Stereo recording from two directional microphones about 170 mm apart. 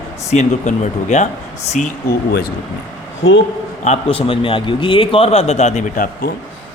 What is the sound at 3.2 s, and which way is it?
Speech, 90° left.